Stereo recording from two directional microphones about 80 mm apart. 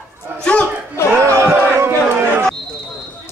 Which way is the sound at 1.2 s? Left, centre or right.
Right.